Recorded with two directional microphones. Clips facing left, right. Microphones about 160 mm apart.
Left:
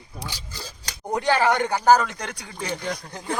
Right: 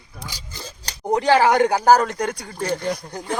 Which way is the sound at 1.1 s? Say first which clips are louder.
Right 5 dB; 90° right.